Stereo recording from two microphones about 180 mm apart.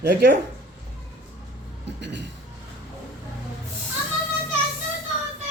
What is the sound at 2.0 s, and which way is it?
Speech, 75° right (ahead or behind).